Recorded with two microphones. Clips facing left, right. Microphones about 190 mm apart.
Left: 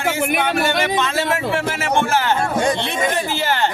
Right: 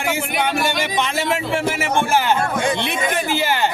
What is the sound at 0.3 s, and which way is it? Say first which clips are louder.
Speech: left 2 dB; 60° left (ahead or behind).